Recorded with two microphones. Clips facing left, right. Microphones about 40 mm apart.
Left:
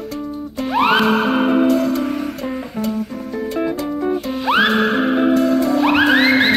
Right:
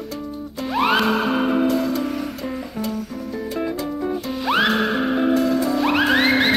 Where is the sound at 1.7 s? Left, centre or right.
Centre.